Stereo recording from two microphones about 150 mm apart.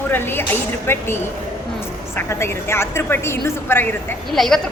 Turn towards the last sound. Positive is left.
turn(degrees=0)  # may be behind; listen again after turning